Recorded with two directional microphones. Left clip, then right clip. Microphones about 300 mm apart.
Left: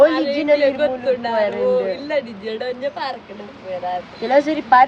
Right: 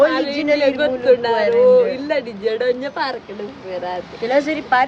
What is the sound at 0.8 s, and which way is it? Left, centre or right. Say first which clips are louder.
Speech: even; centre.